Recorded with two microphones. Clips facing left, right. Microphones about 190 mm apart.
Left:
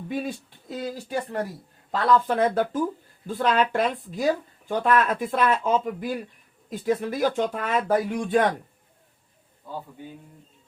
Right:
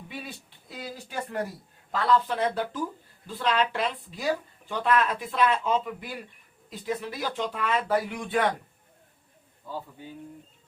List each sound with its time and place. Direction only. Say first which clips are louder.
0.1 s speech: left 12 dB; 45° left (ahead or behind)
2.2 s speech: left 5 dB; 50° left (ahead or behind)